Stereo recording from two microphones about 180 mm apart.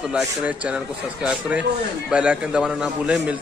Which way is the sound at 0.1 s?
5° right (ahead or behind).